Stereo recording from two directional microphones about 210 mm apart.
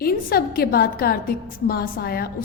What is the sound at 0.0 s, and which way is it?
A woman's voice, 45° left (ahead or behind).